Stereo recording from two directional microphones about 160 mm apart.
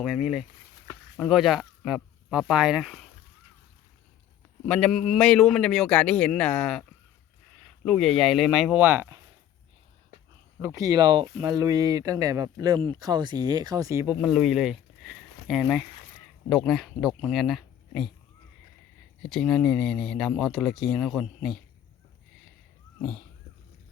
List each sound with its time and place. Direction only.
0.0 s speech: centre (ahead or behind)
4.6 s speech: 5° left (ahead or behind)
7.9 s speech: centre (ahead or behind); by 9.2 s 15° right (ahead or behind)
10.6 s speech: 20° right (ahead or behind)
14.2 s speech: centre (ahead or behind)
19.3 s speech: 5° left (ahead or behind)
23.0 s cat: 5° left (ahead or behind)